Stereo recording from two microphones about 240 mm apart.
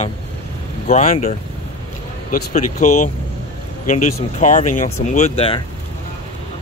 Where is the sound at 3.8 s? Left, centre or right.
Left.